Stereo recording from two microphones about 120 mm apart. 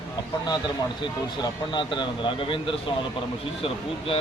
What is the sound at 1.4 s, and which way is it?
Speech, 40° left (ahead or behind).